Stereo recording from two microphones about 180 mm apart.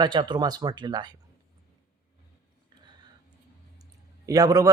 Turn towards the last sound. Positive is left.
turn(degrees=-20)  # may be behind; listen again after turning